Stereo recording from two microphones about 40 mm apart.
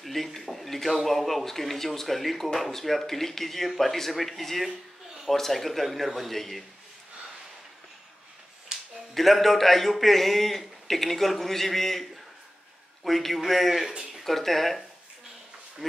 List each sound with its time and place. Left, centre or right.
0.0 s speech: centre
8.7 s a sound: centre
9.1 s speech: centre